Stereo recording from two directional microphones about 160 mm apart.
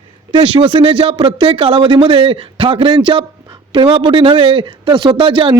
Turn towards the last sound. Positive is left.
turn(degrees=-30)  # may be behind; listen again after turning